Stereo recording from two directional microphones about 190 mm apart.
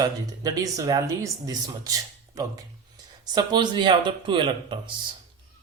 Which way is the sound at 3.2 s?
20° right (ahead or behind).